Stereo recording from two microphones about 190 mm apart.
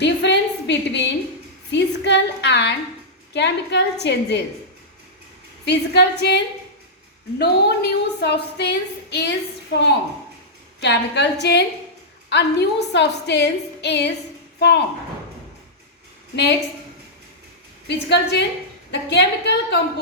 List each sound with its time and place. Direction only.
0.0 s a sound: 65° left (ahead or behind)
3.3 s a woman's voice: 65° left (ahead or behind)
5.6 s a woman's voice: 60° left (ahead or behind)
10.8 s a woman's voice: 65° left (ahead or behind)
16.3 s a woman's voice: 60° left (ahead or behind)
17.8 s a woman's voice: 65° left (ahead or behind)